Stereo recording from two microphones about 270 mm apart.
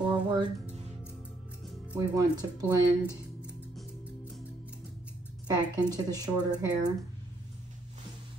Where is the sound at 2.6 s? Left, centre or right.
Centre.